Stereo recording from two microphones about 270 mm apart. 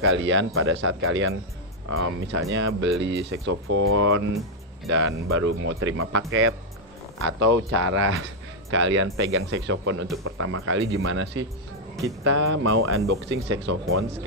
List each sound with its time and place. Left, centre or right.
0.0 s speech: right